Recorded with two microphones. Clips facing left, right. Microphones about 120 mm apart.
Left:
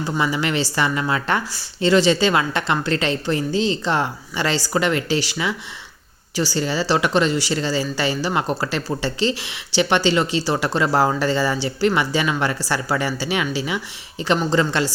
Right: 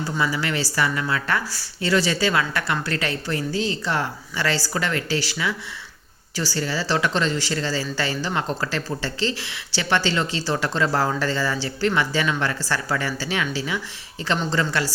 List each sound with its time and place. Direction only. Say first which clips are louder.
0.0 s speech: left 3 dB; 20° left (ahead or behind)